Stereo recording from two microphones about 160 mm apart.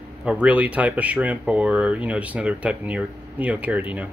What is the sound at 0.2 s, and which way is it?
Speech, 10° right (ahead or behind).